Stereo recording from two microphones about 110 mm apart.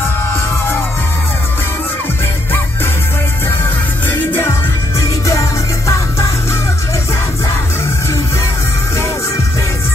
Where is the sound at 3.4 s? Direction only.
20° left (ahead or behind).